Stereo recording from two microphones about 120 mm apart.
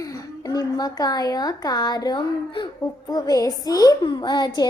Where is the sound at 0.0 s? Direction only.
30° left (ahead or behind).